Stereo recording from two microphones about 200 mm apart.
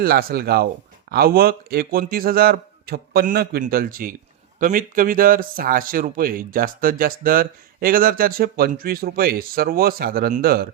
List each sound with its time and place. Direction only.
0.0 s speech: 50° right (ahead or behind)